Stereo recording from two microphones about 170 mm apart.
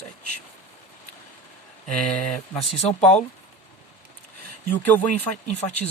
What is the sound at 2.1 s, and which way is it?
Speech, 5° left (ahead or behind).